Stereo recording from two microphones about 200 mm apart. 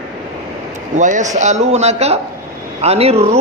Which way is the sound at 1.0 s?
40° right (ahead or behind).